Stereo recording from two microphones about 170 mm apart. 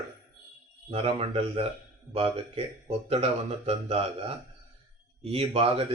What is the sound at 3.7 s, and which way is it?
Speech, 35° right (ahead or behind).